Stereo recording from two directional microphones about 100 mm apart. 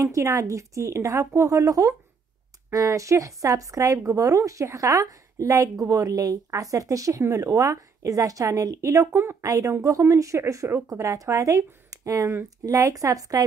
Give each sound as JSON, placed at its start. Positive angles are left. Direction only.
{"t": 0.0, "sound": "a woman's voice", "side_deg": -30}